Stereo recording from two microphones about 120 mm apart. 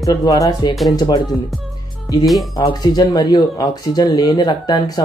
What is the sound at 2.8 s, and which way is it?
Speech, 35° left (ahead or behind).